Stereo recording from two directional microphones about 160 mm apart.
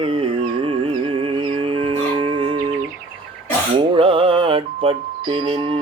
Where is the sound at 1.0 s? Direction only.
30° right (ahead or behind).